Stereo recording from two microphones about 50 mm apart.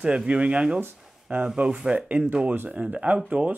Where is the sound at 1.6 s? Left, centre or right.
Centre.